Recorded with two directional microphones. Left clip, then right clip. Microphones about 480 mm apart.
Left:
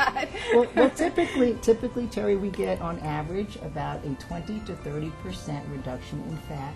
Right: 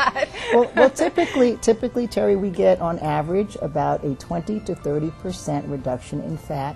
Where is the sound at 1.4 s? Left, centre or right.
Right.